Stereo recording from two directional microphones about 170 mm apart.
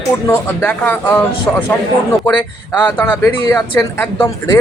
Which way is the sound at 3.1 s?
20° left (ahead or behind).